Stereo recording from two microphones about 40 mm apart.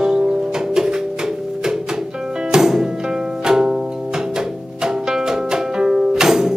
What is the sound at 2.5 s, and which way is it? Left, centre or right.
Music, centre.